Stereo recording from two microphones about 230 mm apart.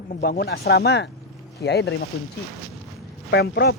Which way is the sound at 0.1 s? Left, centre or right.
Left.